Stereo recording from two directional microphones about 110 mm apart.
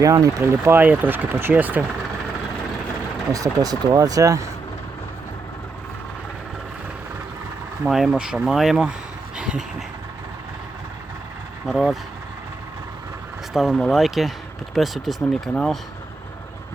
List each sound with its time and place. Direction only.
0.0 s speech: 30° right (ahead or behind)
3.3 s speech: 35° right (ahead or behind)
7.9 s speech: 5° right (ahead or behind)
9.4 s vehicle: 5° right (ahead or behind)
11.6 s speech: centre (ahead or behind)
13.5 s speech: centre (ahead or behind)